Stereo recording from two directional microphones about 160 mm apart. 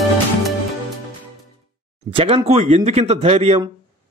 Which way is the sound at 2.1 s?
35° right (ahead or behind).